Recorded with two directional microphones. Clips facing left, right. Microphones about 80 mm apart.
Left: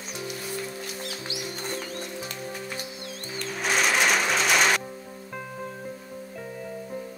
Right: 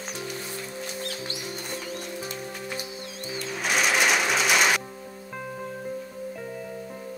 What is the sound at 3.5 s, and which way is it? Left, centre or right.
Music, centre.